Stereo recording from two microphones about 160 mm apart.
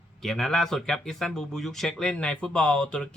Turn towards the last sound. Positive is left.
turn(degrees=5)  # may be behind; listen again after turning